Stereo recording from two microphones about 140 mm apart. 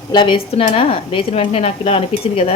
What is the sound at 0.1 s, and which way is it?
A woman's voice, 35° left (ahead or behind).